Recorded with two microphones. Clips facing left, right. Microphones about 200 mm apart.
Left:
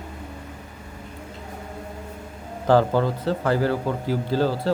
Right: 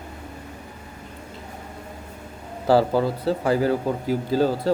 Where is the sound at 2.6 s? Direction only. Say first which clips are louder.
Even; 10° right (ahead or behind).